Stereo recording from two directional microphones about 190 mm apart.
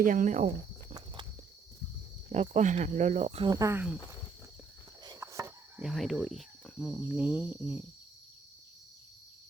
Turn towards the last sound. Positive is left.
turn(degrees=-5)  # may be behind; listen again after turning